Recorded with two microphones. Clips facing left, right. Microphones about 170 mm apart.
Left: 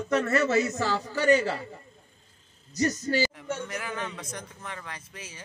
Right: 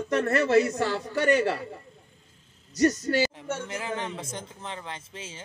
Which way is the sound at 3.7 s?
25° right (ahead or behind).